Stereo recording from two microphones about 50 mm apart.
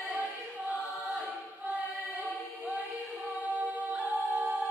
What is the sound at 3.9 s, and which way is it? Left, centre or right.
A capella, right.